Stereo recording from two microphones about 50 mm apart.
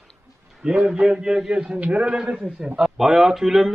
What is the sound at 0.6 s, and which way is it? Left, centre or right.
A man's voice, centre.